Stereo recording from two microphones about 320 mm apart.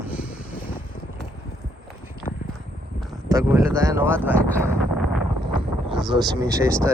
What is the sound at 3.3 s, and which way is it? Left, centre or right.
Speech, centre.